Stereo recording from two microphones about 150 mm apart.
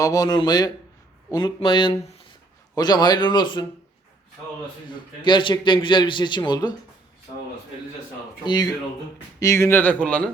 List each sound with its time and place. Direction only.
0.0 s a man's voice: 25° left (ahead or behind)
4.9 s a man's voice: 30° left (ahead or behind)
9.4 s speech: 20° left (ahead or behind)